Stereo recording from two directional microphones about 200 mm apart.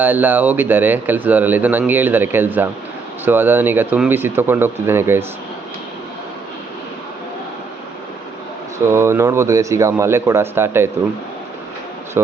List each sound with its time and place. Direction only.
0.0 s a man's voice: 10° right (ahead or behind)
8.9 s a man's voice: 15° right (ahead or behind)
12.2 s a man's voice: 10° right (ahead or behind)